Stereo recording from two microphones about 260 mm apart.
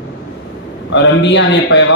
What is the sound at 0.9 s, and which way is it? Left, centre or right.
Speech, left.